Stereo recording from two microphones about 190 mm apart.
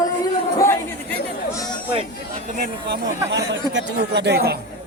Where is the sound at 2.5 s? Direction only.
50° right (ahead or behind).